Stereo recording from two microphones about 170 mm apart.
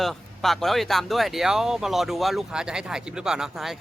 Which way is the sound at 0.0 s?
Centre (ahead or behind).